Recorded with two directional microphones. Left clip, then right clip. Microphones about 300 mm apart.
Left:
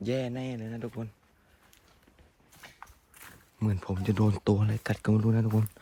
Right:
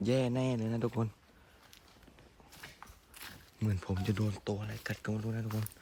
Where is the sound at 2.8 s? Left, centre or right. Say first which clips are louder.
Left 4 dB; centre.